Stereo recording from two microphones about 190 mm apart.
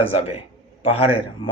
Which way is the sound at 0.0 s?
30° left (ahead or behind).